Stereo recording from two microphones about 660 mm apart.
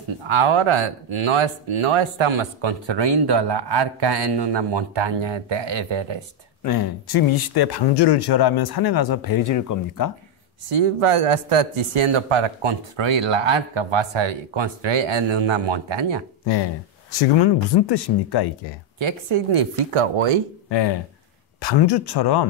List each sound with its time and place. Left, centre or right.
0.2 s speech: right
6.6 s speech: left
10.7 s speech: right
17.4 s speech: left
18.9 s speech: right
21.5 s speech: left